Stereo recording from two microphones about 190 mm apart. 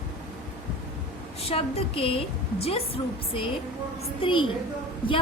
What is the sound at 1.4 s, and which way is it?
A woman's voice, 30° left (ahead or behind).